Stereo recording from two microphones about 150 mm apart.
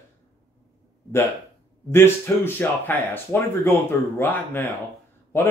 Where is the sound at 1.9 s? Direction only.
15° left (ahead or behind).